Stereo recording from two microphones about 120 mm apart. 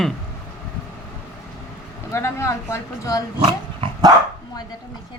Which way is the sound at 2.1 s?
25° left (ahead or behind).